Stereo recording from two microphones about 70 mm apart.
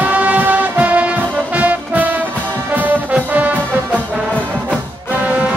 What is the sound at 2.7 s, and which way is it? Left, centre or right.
Brass instrument, right.